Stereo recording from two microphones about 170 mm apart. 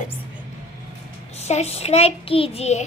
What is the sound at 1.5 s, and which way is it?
A child's voice, 40° left (ahead or behind).